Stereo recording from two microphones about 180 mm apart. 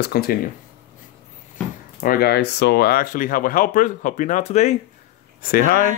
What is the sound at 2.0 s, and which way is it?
Speech, 55° left (ahead or behind).